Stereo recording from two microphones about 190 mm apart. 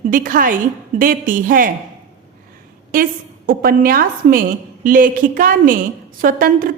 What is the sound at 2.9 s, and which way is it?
A woman's voice, 45° right (ahead or behind).